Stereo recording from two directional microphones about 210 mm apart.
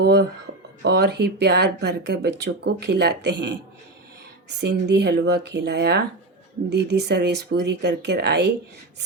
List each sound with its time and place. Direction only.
0.0 s speech: 50° right (ahead or behind)